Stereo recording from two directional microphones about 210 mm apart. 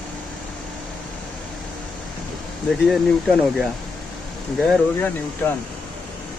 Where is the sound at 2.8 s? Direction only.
Centre (ahead or behind).